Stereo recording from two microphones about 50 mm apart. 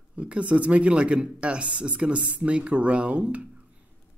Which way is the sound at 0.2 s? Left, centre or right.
Right.